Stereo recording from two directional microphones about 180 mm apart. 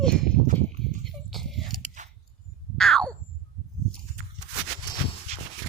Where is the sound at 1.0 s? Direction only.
Centre (ahead or behind).